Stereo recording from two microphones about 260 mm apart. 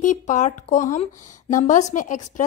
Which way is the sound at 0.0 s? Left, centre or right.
Left.